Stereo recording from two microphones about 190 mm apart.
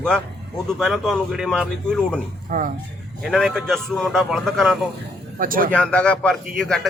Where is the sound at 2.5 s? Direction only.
45° right (ahead or behind).